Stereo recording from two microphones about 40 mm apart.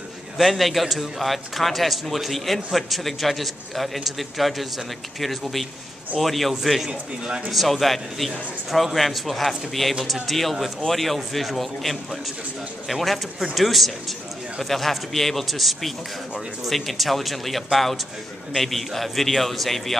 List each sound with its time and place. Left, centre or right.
0.4 s a man's voice: centre
6.9 s speech: right
7.5 s a man's voice: centre